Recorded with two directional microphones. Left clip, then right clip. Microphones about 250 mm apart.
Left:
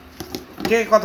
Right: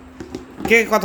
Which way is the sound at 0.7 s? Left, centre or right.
Right.